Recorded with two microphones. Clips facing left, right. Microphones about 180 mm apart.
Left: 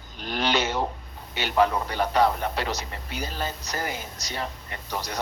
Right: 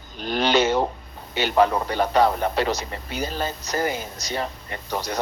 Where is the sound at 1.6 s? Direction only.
45° right (ahead or behind).